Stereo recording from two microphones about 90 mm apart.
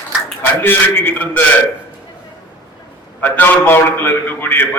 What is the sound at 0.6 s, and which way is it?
Speech, 25° left (ahead or behind).